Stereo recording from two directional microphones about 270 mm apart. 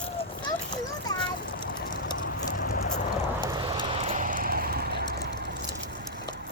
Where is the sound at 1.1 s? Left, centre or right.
Centre.